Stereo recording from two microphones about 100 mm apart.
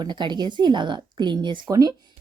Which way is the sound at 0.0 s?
50° right (ahead or behind).